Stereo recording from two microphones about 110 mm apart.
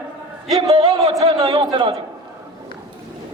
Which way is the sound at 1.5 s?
45° right (ahead or behind).